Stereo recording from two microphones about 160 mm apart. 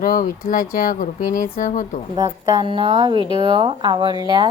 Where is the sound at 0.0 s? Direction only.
60° left (ahead or behind).